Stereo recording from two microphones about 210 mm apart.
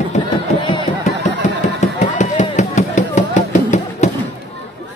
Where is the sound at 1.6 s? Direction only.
35° left (ahead or behind).